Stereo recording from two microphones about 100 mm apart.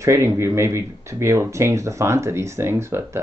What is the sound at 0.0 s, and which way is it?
Speech, 30° right (ahead or behind).